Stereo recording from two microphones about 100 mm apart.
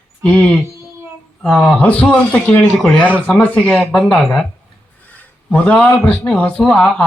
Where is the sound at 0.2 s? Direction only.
15° left (ahead or behind).